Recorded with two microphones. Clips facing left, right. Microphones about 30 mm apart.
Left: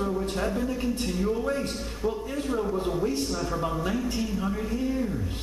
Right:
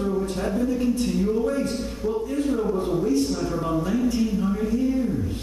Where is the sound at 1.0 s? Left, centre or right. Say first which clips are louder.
Right 4 dB; centre.